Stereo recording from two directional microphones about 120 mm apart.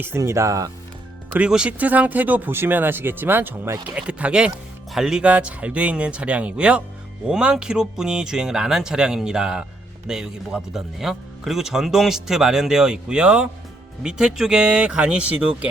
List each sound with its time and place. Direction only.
0.0 s speech: 20° right (ahead or behind)
1.4 s speech: 10° right (ahead or behind)